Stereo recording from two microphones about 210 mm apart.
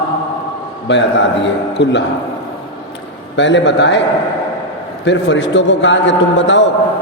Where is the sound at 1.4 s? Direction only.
55° left (ahead or behind).